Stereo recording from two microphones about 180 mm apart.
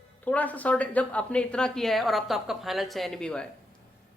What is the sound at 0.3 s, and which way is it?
A woman's voice, 10° left (ahead or behind).